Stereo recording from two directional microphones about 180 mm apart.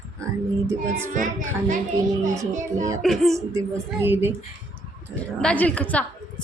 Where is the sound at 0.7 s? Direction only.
15° right (ahead or behind).